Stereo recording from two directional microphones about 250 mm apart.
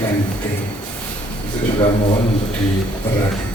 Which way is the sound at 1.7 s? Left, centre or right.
Centre.